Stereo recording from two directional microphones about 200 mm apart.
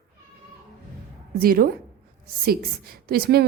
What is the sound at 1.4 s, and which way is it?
A woman's voice, 45° right (ahead or behind).